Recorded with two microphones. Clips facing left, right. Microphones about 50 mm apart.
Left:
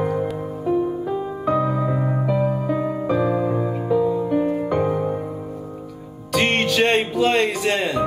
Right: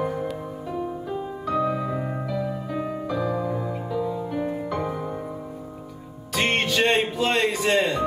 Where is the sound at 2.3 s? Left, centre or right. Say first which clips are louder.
Left 8 dB; left.